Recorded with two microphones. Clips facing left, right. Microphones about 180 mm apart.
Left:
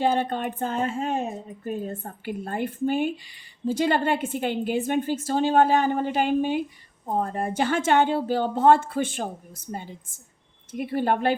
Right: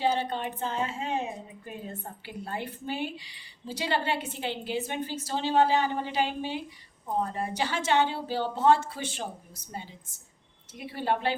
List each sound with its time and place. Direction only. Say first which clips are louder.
0.0 s speech: left 4 dB; 50° left (ahead or behind)